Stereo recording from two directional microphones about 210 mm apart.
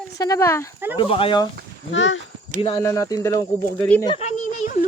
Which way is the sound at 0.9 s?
25° left (ahead or behind).